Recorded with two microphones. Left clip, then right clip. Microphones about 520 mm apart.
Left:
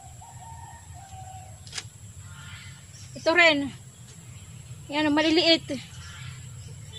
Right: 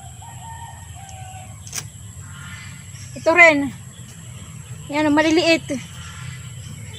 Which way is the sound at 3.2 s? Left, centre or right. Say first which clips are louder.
Right 7 dB; left.